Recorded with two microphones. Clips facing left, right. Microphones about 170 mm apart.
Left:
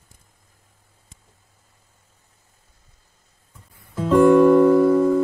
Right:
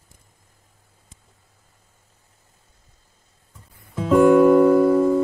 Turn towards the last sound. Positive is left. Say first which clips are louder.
# even
turn(degrees=-5)  # may be behind; listen again after turning